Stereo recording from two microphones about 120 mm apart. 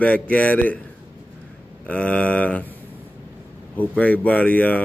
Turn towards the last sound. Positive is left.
turn(degrees=10)  # may be behind; listen again after turning